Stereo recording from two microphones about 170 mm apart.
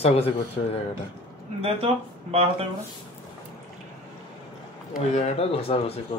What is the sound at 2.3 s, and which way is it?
Speech, 35° right (ahead or behind).